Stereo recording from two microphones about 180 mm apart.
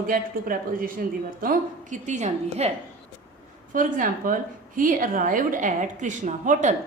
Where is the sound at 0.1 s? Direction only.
50° right (ahead or behind).